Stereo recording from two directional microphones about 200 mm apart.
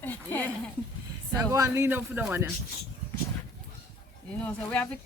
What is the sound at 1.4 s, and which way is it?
Speech, 15° right (ahead or behind).